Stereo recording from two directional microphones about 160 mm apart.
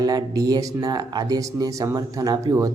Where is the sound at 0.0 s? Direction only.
25° right (ahead or behind).